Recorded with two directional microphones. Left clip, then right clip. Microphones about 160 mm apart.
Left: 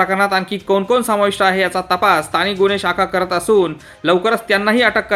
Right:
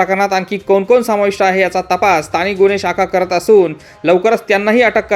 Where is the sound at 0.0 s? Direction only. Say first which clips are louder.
Right 2 dB; 15° right (ahead or behind).